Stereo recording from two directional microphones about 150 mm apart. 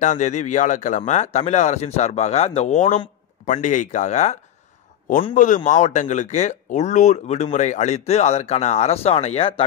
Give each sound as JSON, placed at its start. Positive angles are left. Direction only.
{"t": 0.0, "sound": "a man's voice", "side_deg": 55}